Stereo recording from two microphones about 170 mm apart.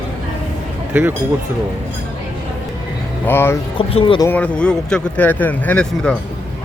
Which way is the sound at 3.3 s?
15° left (ahead or behind).